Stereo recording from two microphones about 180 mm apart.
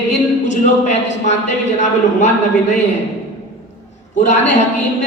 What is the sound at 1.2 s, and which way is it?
A man's voice, 40° left (ahead or behind).